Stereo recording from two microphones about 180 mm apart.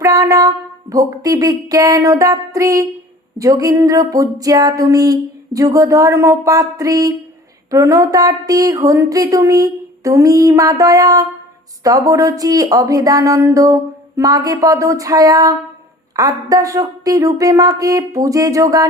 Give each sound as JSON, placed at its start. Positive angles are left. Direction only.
{"t": 0.0, "sound": "speech", "side_deg": -20}